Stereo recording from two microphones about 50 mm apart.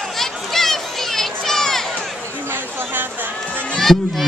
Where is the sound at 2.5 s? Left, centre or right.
Right.